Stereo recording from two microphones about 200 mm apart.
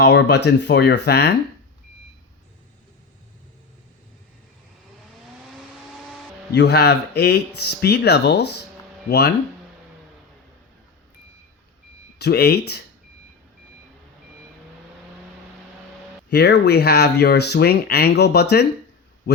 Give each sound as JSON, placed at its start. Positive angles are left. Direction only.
{"t": 0.0, "sound": "speech", "side_deg": 60}
{"t": 6.5, "sound": "speech", "side_deg": 55}
{"t": 12.2, "sound": "speech", "side_deg": 55}
{"t": 16.3, "sound": "speech", "side_deg": 55}